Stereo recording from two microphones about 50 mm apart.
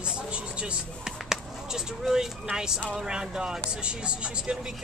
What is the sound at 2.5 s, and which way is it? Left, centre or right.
Speech, centre.